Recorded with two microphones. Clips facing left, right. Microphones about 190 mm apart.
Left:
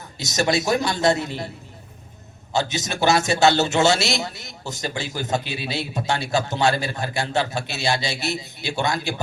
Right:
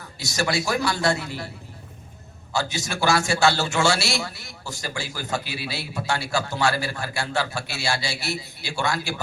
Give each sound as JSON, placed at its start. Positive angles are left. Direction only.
{"t": 0.2, "sound": "a man's voice", "side_deg": 20}
{"t": 2.5, "sound": "a man's voice", "side_deg": 20}